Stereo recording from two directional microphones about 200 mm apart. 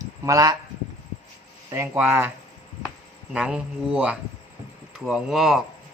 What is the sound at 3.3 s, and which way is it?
Speech, 5° right (ahead or behind).